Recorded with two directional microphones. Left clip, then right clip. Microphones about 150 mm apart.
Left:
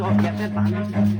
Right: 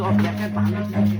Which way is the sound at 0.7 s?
Centre (ahead or behind).